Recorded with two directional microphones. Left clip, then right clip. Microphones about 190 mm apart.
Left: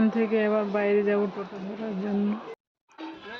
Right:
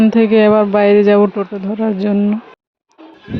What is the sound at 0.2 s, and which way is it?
Speech, 55° right (ahead or behind).